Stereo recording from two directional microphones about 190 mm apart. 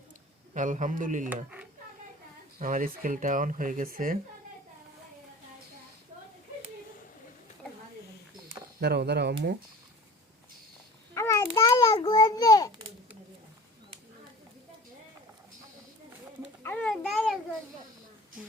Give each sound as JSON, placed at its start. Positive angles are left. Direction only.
{"t": 0.5, "sound": "speech", "side_deg": -40}
{"t": 2.6, "sound": "speech", "side_deg": -45}
{"t": 8.8, "sound": "speech", "side_deg": -60}
{"t": 11.1, "sound": "a sound", "side_deg": 15}
{"t": 16.6, "sound": "babbling", "side_deg": 5}